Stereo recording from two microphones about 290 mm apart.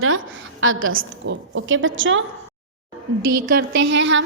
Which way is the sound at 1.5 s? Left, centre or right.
Right.